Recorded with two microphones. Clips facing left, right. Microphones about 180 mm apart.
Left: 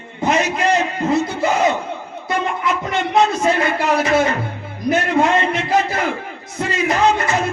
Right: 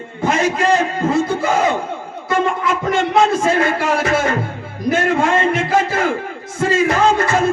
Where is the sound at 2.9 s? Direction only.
50° right (ahead or behind).